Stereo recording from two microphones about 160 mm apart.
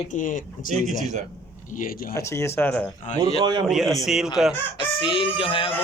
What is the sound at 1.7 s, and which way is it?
Speech, 60° left (ahead or behind).